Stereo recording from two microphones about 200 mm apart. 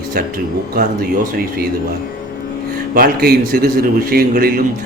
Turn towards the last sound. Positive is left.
turn(degrees=-45)  # may be behind; listen again after turning